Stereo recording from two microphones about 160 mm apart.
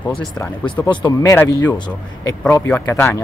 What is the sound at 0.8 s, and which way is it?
Speech, 30° left (ahead or behind).